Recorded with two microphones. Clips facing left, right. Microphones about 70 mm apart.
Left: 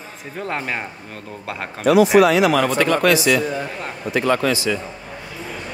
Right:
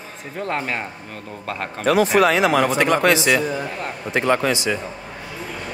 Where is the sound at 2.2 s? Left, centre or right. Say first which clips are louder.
Left 2 dB; right.